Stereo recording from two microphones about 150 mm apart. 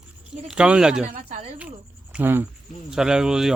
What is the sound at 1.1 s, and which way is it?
Speech, 55° right (ahead or behind).